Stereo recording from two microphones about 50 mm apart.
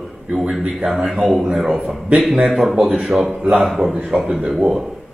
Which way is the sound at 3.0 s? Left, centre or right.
Centre.